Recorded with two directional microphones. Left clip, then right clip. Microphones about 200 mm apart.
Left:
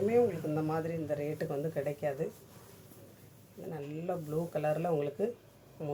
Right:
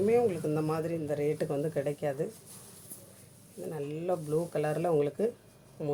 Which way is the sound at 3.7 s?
50° right (ahead or behind).